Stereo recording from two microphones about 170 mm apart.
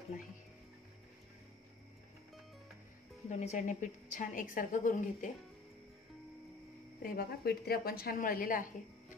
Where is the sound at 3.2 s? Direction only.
45° left (ahead or behind).